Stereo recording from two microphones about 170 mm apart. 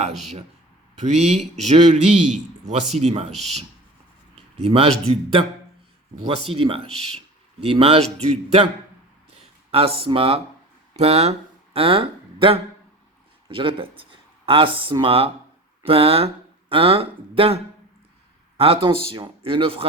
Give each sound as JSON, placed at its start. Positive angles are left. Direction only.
{"t": 0.9, "sound": "a man's voice", "side_deg": -40}
{"t": 4.6, "sound": "a man's voice", "side_deg": -35}
{"t": 9.3, "sound": "a man's voice", "side_deg": -35}